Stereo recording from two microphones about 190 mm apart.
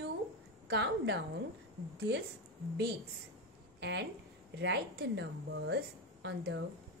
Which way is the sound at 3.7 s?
65° right (ahead or behind).